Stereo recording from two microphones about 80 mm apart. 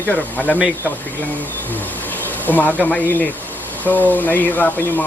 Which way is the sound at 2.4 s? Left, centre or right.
Left.